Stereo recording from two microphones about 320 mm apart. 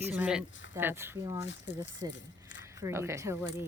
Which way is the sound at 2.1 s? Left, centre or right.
Left.